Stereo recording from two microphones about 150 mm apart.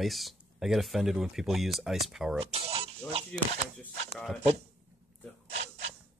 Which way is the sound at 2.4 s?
40° right (ahead or behind).